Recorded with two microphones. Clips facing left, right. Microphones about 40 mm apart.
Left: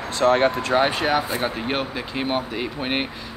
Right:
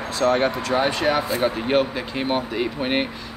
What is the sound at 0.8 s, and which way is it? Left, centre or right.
Speech, centre.